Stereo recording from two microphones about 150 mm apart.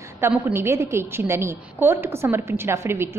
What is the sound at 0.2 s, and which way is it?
A woman's voice, 10° right (ahead or behind).